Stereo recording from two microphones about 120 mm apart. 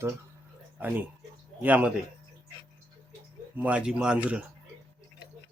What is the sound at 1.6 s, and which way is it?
Speech, 15° right (ahead or behind).